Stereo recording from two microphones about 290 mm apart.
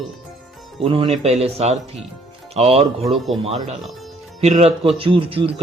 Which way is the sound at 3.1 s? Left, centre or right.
Centre.